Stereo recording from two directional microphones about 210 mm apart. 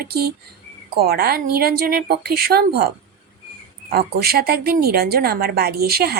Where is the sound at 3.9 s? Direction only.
45° right (ahead or behind).